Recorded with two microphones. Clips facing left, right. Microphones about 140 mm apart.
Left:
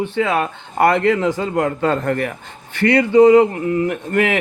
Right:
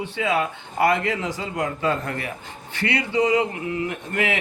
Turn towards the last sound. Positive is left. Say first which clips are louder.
# left 7 dB
turn(degrees=50)  # may be behind; listen again after turning